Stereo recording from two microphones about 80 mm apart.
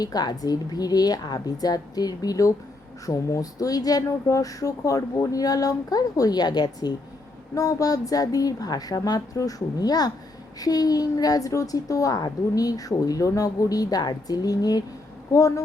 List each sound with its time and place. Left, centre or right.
0.0 s a woman's voice: left
7.5 s speech: left
15.3 s speech: left